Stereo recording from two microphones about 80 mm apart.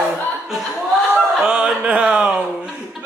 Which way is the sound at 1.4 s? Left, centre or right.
Centre.